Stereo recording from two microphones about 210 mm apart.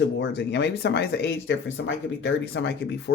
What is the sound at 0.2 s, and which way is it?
Speech, 55° left (ahead or behind).